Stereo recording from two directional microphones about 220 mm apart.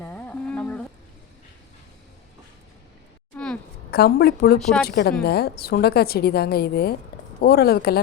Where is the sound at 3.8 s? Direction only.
45° left (ahead or behind).